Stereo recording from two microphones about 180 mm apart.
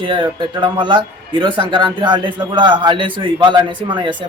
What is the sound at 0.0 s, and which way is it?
A man's voice, 25° right (ahead or behind).